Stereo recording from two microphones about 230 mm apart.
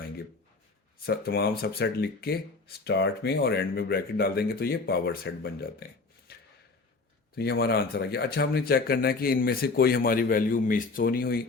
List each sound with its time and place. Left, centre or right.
1.0 s speech: left
7.3 s speech: left